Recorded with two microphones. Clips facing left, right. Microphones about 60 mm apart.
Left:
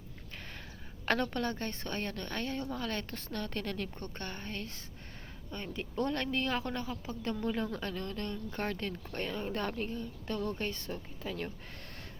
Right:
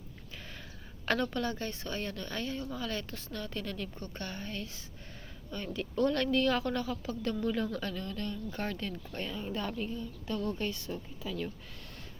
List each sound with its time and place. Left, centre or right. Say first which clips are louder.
1.0 s a woman's voice: even; left
4.0 s speech: right 1 dB; left
5.7 s a woman's voice: right 4 dB; left